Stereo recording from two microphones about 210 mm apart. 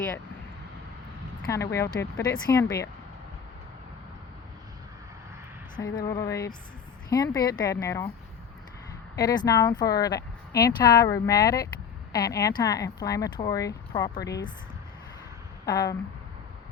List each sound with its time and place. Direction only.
1.5 s speech: 15° left (ahead or behind)
5.8 s speech: 15° left (ahead or behind)
9.1 s speech: 20° left (ahead or behind)
15.6 s speech: 15° left (ahead or behind)